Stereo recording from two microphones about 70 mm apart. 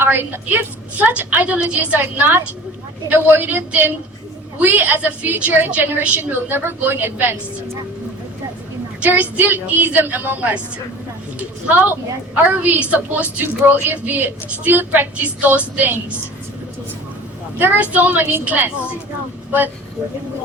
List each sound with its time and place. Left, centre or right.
0.0 s a sound: right
0.4 s a woman's voice: right
4.6 s a woman's voice: right
9.0 s a woman's voice: right
17.6 s a woman's voice: right